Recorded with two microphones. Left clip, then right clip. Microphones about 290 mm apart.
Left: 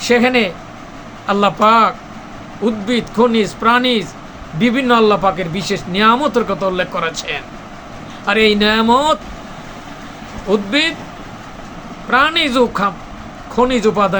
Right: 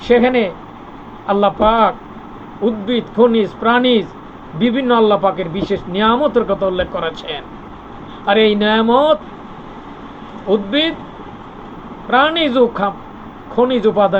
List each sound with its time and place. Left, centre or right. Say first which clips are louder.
0.0 s speech: even; centre
10.5 s speech: even; centre
12.1 s speech: even; centre